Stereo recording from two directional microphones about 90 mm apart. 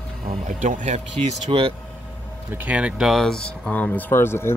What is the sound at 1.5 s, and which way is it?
Speech, 85° right.